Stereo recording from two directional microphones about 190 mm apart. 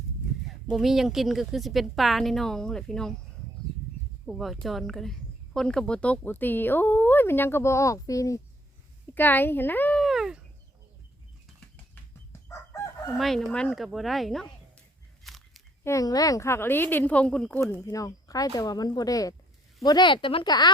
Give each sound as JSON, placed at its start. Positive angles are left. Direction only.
{"t": 0.7, "sound": "a woman's voice", "side_deg": 0}
{"t": 4.3, "sound": "speech", "side_deg": 0}
{"t": 9.0, "sound": "a sound", "side_deg": 10}
{"t": 12.3, "sound": "chicken", "side_deg": 15}
{"t": 13.1, "sound": "a woman's voice", "side_deg": 0}
{"t": 15.2, "sound": "a sound", "side_deg": 0}
{"t": 15.8, "sound": "speech", "side_deg": 15}
{"t": 17.7, "sound": "speech", "side_deg": 15}